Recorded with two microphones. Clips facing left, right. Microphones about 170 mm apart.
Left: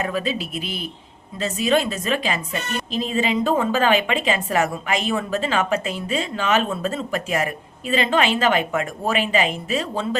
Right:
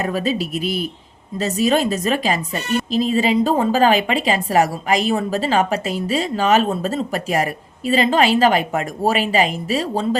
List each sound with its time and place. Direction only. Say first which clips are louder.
0.0 s a woman's voice: right 3 dB; 40° right (ahead or behind)